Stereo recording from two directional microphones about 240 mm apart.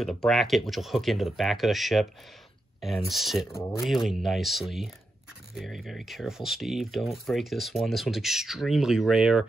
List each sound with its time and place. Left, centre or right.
0.0 s speech: centre